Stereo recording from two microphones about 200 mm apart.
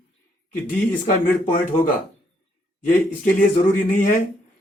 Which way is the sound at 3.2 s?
40° left (ahead or behind).